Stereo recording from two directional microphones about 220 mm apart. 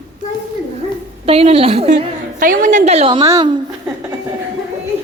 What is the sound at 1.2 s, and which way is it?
A woman's voice, 25° right (ahead or behind).